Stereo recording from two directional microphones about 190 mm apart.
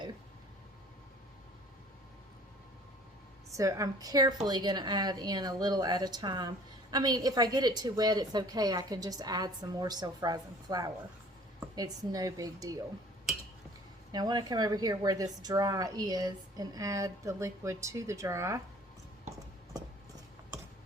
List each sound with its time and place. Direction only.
3.5 s speech: 15° right (ahead or behind)
14.1 s speech: 20° right (ahead or behind)